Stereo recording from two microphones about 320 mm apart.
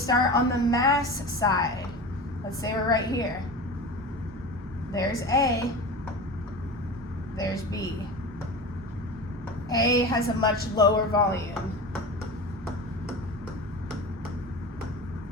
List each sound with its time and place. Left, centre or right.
0.0 s a woman's voice: centre
2.6 s a woman's voice: centre
4.9 s a woman's voice: centre
7.3 s a woman's voice: centre
9.6 s a woman's voice: centre